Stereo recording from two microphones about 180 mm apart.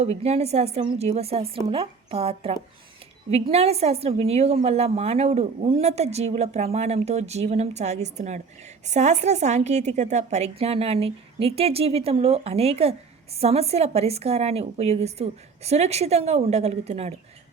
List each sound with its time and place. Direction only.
0.0 s a woman's voice: 35° right (ahead or behind)